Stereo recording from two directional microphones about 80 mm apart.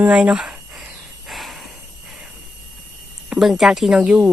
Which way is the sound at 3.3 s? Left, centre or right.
Centre.